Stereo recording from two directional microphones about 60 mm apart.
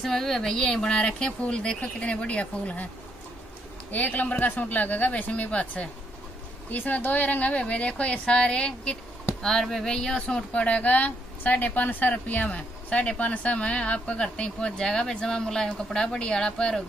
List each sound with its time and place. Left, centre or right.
0.0 s speech: centre; by 2.9 s left
3.9 s speech: left